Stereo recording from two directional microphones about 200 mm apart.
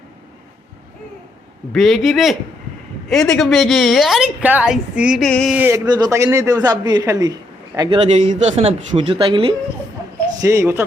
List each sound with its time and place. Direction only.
1.7 s a woman's voice: centre (ahead or behind)
5.5 s a man's voice: 10° right (ahead or behind)
10.4 s a man's voice: 15° right (ahead or behind)